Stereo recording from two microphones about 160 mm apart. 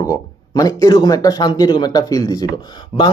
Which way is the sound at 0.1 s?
20° left (ahead or behind).